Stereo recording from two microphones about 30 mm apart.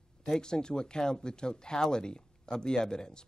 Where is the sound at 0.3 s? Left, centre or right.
Left.